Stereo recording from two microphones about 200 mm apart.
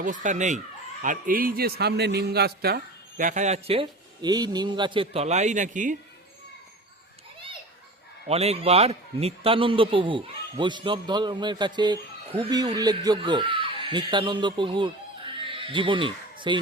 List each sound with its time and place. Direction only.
0.0 s a man's voice: 40° right (ahead or behind)
8.3 s a man's voice: 30° right (ahead or behind)
15.4 s a sound: 25° right (ahead or behind)